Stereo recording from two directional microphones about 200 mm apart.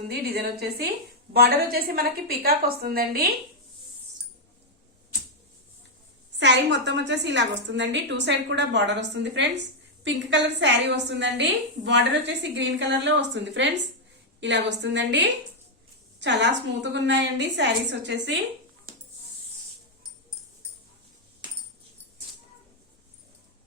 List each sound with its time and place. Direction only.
0.1 s a woman's voice: 50° right (ahead or behind)
6.4 s a woman's voice: 60° right (ahead or behind)